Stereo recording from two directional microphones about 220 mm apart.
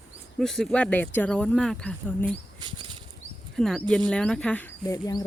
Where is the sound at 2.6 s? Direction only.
20° right (ahead or behind).